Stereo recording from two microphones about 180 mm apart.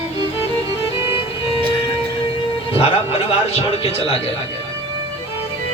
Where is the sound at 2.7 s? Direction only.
35° left (ahead or behind).